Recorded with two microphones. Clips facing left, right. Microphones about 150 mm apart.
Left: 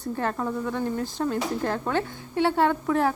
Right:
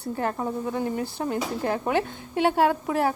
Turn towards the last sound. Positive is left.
turn(degrees=-10)  # may be behind; listen again after turning